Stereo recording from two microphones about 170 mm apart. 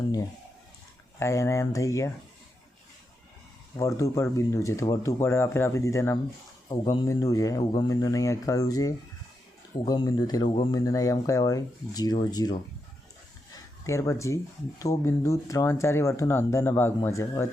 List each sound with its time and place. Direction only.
1.2 s speech: 15° left (ahead or behind)
3.8 s speech: 20° left (ahead or behind)
13.5 s a sound: 20° left (ahead or behind)
14.8 s speech: 20° left (ahead or behind)